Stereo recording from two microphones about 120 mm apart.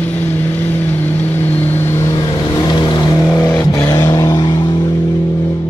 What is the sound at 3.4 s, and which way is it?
Vehicle, 20° left (ahead or behind).